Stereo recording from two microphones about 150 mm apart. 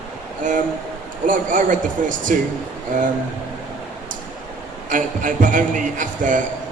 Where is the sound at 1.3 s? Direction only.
60° right (ahead or behind).